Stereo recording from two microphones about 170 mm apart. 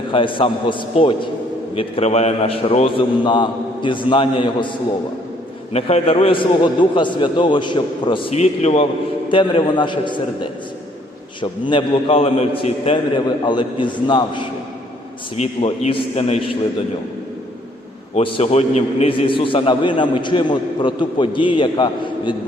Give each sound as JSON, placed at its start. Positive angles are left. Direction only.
{"t": 0.1, "sound": "a man's voice", "side_deg": 30}
{"t": 5.7, "sound": "a man's voice", "side_deg": 35}
{"t": 13.2, "sound": "a man's voice", "side_deg": 25}
{"t": 18.1, "sound": "a man's voice", "side_deg": 35}